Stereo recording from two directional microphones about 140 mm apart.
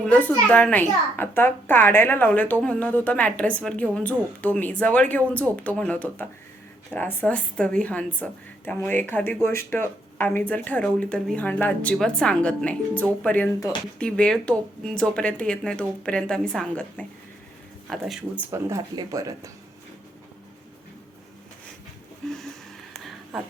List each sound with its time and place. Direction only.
0.0 s a woman's voice: 10° left (ahead or behind); by 18.4 s 5° right (ahead or behind)
18.5 s speech: 25° right (ahead or behind)
22.2 s a sound: 5° left (ahead or behind)